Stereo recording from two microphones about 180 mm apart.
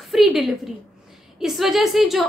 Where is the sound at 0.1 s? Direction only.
Centre (ahead or behind).